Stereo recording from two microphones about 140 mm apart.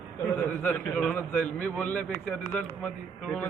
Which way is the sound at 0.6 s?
10° left (ahead or behind).